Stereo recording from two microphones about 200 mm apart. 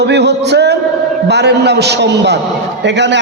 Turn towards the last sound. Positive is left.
turn(degrees=-60)  # may be behind; listen again after turning